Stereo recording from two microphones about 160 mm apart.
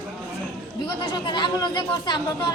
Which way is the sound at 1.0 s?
30° left (ahead or behind).